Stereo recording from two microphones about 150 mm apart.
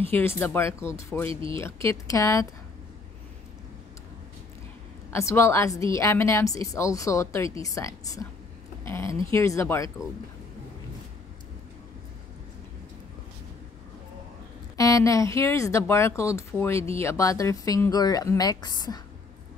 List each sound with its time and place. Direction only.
0.1 s speech: 15° left (ahead or behind)
1.3 s speech: 35° right (ahead or behind)
1.6 s a woman's voice: 20° left (ahead or behind)
5.1 s a woman's voice: 20° left (ahead or behind)
8.8 s a sound: 15° left (ahead or behind)
9.3 s a woman's voice: 20° left (ahead or behind)
14.8 s a woman's voice: 20° left (ahead or behind)